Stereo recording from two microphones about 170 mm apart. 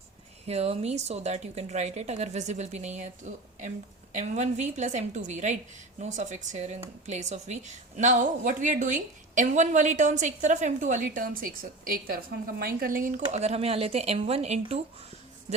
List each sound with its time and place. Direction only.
0.4 s a woman's voice: 35° right (ahead or behind)